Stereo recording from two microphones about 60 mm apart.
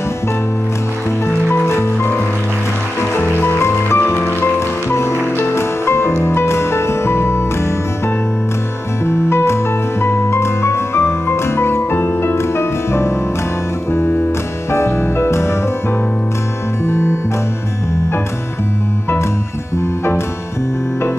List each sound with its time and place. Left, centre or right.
1.7 s music: left
4.0 s music: left
9.0 s music: left
14.7 s music: left
16.8 s music: left